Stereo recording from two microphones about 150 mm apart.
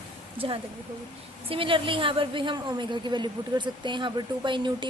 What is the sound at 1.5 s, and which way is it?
A woman's voice, 35° right (ahead or behind).